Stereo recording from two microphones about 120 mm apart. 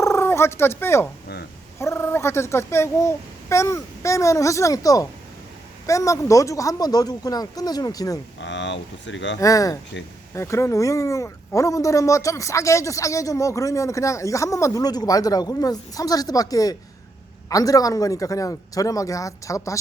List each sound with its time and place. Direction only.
0.0 s a man's voice: 25° left (ahead or behind)
9.4 s a man's voice: 30° left (ahead or behind)